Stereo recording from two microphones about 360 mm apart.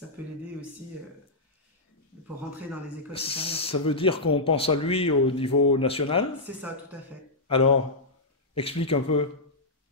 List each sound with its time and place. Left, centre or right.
3.1 s speech: centre
8.5 s speech: centre